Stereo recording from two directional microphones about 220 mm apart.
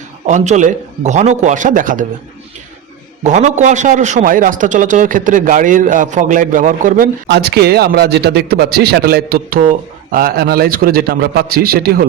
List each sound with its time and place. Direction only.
0.3 s a man's voice: 35° right (ahead or behind)
3.2 s a man's voice: 35° right (ahead or behind)